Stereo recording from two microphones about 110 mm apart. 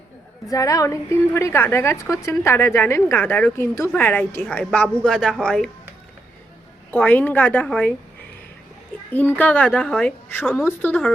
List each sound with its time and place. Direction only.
0.5 s a woman's voice: 30° left (ahead or behind); by 5.7 s 5° left (ahead or behind)
6.9 s speech: 15° left (ahead or behind)
9.1 s speech: 15° left (ahead or behind)